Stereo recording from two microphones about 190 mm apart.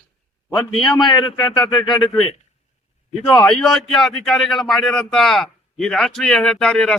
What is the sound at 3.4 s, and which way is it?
A man's voice, centre (ahead or behind).